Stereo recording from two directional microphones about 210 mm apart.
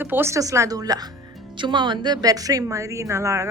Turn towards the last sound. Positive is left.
turn(degrees=-15)  # may be behind; listen again after turning